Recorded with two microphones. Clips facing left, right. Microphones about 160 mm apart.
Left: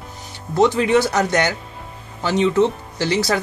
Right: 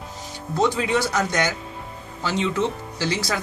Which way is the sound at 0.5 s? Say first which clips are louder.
Left 6 dB; 65° left (ahead or behind).